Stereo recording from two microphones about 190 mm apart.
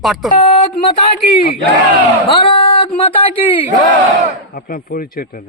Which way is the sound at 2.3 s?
30° left (ahead or behind).